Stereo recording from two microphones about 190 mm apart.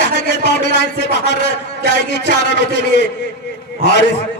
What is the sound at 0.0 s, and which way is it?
A man's voice, 65° left (ahead or behind).